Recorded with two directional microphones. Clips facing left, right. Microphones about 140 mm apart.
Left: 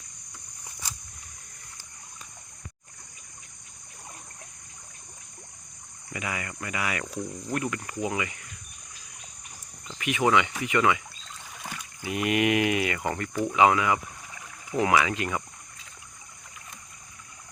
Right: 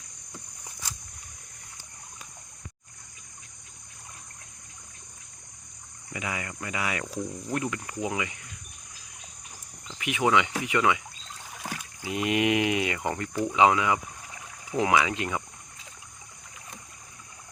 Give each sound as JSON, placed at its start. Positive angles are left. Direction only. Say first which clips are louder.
{"t": 6.1, "sound": "a sound", "louder": "even", "side_deg": -20}
{"t": 7.0, "sound": "speech", "louder": "right 1 dB", "side_deg": -5}
{"t": 7.5, "sound": "speech", "louder": "left 1 dB", "side_deg": -15}
{"t": 10.0, "sound": "speech", "louder": "left 1 dB", "side_deg": -15}
{"t": 11.6, "sound": "rowboat", "louder": "even", "side_deg": -10}
{"t": 12.1, "sound": "a sound", "louder": "left 1 dB", "side_deg": -20}
{"t": 13.1, "sound": "speech", "louder": "even", "side_deg": -15}